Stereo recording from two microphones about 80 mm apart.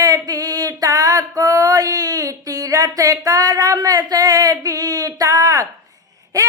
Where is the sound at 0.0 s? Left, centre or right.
Right.